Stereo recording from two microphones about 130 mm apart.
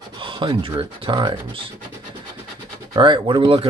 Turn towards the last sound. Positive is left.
turn(degrees=-40)  # may be behind; listen again after turning